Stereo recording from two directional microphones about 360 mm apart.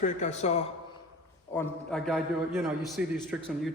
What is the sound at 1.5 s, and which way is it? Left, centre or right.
A man's voice, centre.